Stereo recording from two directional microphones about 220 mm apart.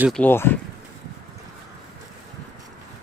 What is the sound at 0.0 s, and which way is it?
Speech, 5° left (ahead or behind).